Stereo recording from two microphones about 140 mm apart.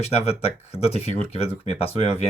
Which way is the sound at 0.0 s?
45° left (ahead or behind).